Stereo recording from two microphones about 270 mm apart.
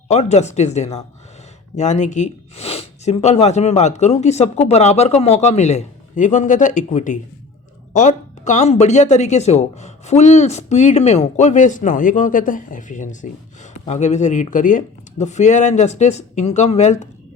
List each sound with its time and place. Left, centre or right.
0.1 s speech: left